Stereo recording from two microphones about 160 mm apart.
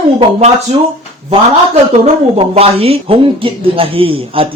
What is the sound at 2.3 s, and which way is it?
A woman's voice, 40° right (ahead or behind).